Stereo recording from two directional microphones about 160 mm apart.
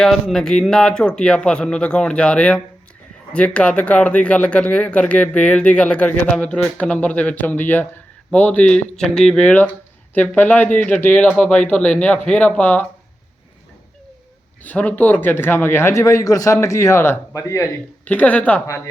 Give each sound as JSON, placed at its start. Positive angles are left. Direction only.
{"t": 0.0, "sound": "speech", "side_deg": 0}
{"t": 14.6, "sound": "speech", "side_deg": 10}
{"t": 18.0, "sound": "speech", "side_deg": 10}